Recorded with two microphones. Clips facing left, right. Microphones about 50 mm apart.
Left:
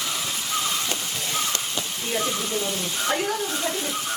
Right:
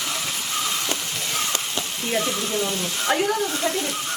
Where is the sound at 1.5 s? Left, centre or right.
Right.